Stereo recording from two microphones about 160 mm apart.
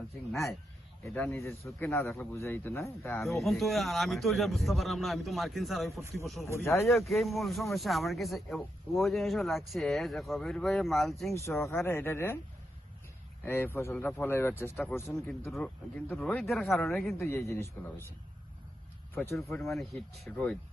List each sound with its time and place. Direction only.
1.0 s speech: 10° left (ahead or behind)
3.2 s a man's voice: centre (ahead or behind)
11.3 s speech: 15° left (ahead or behind)
13.4 s speech: 15° left (ahead or behind)
15.4 s a man's voice: centre (ahead or behind)
17.2 s speech: 15° left (ahead or behind)
19.1 s speech: 15° left (ahead or behind)
19.5 s a man's voice: centre (ahead or behind)